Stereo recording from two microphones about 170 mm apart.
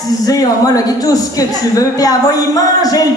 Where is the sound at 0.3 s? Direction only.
20° left (ahead or behind).